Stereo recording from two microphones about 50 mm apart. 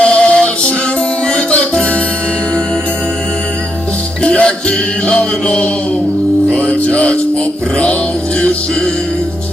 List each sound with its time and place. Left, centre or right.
0.0 s music: left
4.2 s music: left